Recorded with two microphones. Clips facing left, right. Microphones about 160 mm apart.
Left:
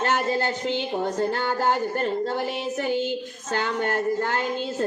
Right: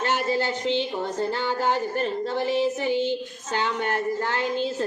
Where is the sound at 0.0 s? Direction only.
45° left (ahead or behind).